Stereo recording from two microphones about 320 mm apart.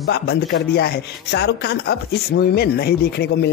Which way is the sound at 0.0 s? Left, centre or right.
Left.